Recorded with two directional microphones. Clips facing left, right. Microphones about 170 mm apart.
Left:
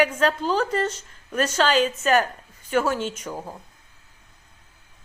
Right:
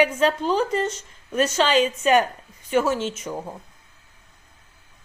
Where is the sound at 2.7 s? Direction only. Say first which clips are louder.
Right 2 dB; 5° right (ahead or behind).